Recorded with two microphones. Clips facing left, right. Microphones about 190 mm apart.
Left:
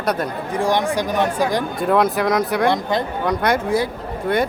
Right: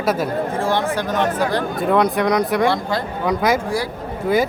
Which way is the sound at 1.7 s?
Centre (ahead or behind).